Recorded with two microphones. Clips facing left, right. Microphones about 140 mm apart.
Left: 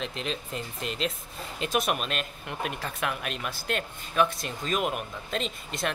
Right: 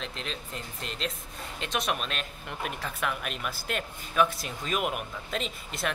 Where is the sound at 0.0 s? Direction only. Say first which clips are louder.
Left 4 dB; 5° left (ahead or behind).